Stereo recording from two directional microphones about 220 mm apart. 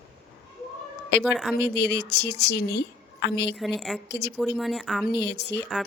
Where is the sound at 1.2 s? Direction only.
Centre (ahead or behind).